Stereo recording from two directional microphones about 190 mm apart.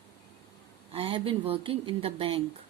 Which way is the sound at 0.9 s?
30° right (ahead or behind).